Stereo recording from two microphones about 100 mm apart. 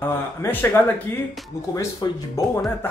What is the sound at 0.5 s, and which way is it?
Speech, 20° left (ahead or behind).